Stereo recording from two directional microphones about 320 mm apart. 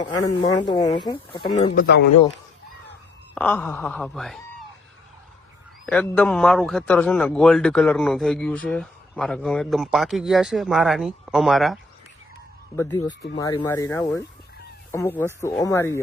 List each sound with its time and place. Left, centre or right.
0.4 s speech: centre
3.3 s a man's voice: centre
5.8 s a man's voice: centre